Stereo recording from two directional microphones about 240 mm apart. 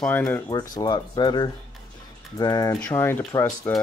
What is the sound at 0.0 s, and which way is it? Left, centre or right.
Speech, centre.